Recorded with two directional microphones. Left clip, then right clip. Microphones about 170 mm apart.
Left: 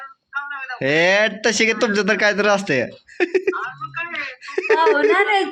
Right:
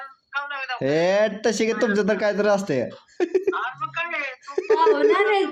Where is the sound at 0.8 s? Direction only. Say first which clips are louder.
Left 4 dB; 5° right (ahead or behind).